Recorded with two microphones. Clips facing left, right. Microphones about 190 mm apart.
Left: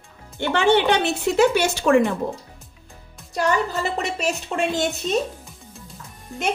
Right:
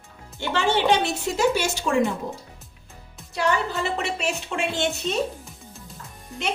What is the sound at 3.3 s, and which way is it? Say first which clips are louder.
A woman's voice: left 2 dB; 40° left (ahead or behind).